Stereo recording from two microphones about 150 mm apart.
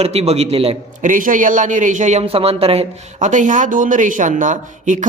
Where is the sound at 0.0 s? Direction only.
45° right (ahead or behind).